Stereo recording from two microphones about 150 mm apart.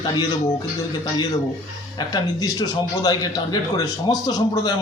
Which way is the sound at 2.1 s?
25° left (ahead or behind).